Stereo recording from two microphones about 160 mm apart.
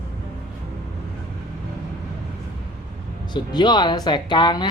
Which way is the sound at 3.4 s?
25° left (ahead or behind).